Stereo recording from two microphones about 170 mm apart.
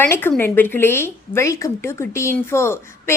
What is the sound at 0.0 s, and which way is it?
A woman's voice, 10° left (ahead or behind).